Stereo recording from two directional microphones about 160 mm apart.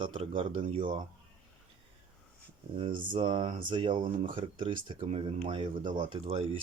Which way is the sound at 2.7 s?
35° right (ahead or behind).